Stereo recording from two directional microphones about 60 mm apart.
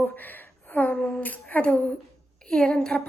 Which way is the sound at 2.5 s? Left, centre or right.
Centre.